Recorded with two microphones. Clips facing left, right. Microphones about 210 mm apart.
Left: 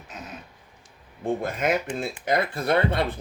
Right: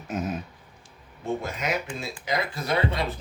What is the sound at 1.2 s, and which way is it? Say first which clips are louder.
Speech: left 4 dB; 55° left (ahead or behind).